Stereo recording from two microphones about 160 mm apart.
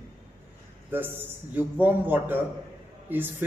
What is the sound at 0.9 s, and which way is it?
A man's voice, 15° right (ahead or behind).